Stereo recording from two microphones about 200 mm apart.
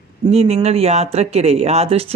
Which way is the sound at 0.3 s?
30° right (ahead or behind).